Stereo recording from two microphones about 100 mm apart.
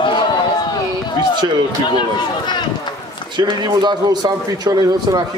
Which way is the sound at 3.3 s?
45° right (ahead or behind).